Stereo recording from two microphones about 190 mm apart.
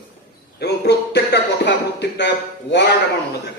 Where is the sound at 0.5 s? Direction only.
60° left (ahead or behind).